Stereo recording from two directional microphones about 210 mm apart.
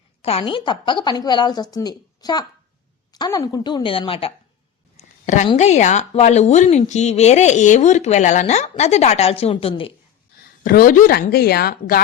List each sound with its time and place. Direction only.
0.2 s a woman's voice: 25° left (ahead or behind)
4.9 s a sound: 35° left (ahead or behind)
5.5 s speech: 30° left (ahead or behind)
10.6 s a woman's voice: 40° left (ahead or behind)